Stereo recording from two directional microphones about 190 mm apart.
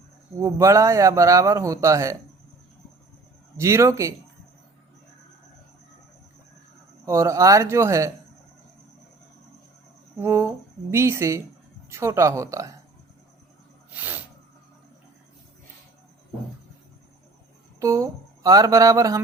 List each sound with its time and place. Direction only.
0.3 s speech: 15° right (ahead or behind)
3.6 s speech: 15° right (ahead or behind)
7.0 s speech: 15° right (ahead or behind)
10.2 s speech: 15° right (ahead or behind)
13.9 s a sound: 10° right (ahead or behind)
17.7 s speech: 15° right (ahead or behind)